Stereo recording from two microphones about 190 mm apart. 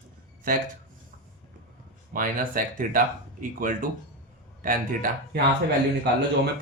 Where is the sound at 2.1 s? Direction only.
45° right (ahead or behind).